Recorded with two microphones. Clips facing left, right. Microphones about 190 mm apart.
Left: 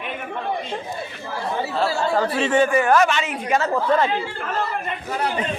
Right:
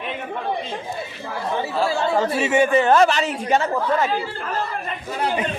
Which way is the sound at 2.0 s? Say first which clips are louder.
Even; 20° right (ahead or behind).